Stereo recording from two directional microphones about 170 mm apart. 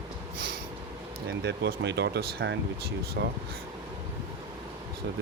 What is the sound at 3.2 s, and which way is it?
Speech, 75° right (ahead or behind).